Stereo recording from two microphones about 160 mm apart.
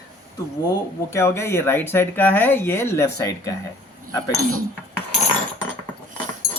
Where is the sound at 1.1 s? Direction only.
15° left (ahead or behind).